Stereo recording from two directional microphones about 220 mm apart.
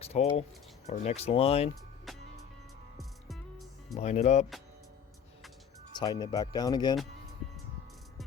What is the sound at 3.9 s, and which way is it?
Speech, 30° left (ahead or behind).